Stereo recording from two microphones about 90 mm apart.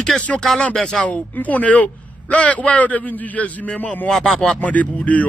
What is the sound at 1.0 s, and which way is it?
A man's voice, 15° left (ahead or behind).